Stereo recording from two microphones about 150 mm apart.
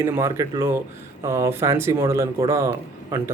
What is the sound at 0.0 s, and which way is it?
Speech, 20° right (ahead or behind).